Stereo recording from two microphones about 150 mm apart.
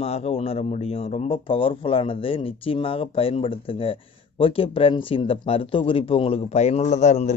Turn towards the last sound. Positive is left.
turn(degrees=50)  # may be behind; listen again after turning